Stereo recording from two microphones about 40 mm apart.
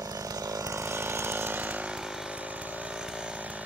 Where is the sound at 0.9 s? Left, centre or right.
Right.